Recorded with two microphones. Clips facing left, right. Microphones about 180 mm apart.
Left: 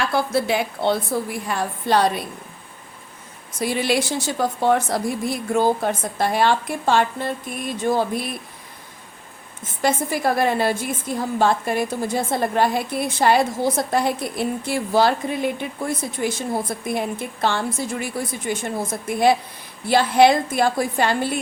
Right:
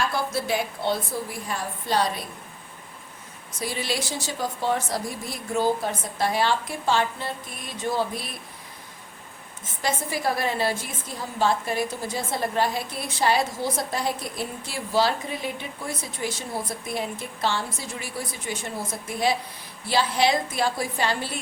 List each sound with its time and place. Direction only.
0.1 s a woman's voice: 65° left (ahead or behind)
3.6 s a woman's voice: 60° left (ahead or behind)
9.8 s a woman's voice: 55° left (ahead or behind)